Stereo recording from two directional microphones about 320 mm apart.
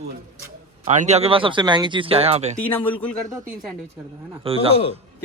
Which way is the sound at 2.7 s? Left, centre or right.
Centre.